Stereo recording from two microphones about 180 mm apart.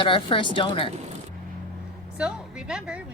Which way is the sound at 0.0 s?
30° left (ahead or behind).